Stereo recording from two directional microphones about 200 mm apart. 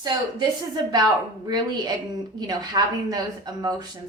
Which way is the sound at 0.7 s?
20° right (ahead or behind).